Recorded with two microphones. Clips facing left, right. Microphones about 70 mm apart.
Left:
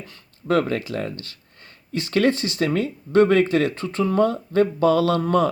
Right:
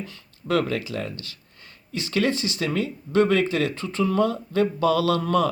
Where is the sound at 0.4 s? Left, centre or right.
Left.